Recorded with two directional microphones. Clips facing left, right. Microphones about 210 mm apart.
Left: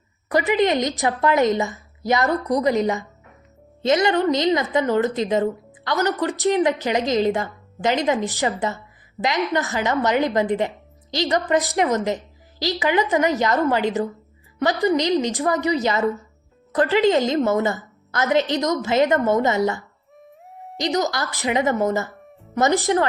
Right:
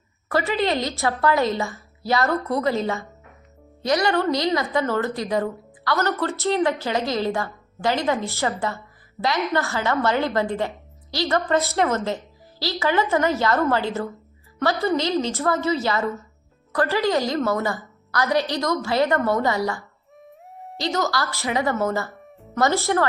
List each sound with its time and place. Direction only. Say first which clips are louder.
0.3 s a woman's voice: left 3 dB; 20° left (ahead or behind)
20.2 s music: even; centre (ahead or behind)
20.7 s a woman's voice: left 2 dB; 20° left (ahead or behind)